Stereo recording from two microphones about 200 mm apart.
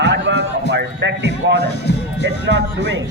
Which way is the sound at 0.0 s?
60° right (ahead or behind).